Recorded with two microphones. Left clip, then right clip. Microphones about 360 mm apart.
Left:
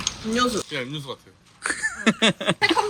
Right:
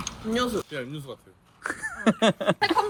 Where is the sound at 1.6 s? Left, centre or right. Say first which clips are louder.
Left 4 dB; centre.